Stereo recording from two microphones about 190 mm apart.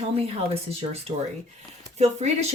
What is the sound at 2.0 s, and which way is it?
Speech, 35° right (ahead or behind).